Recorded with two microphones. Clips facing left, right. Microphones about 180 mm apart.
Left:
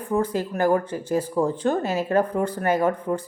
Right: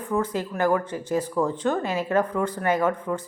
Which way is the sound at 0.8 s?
10° left (ahead or behind).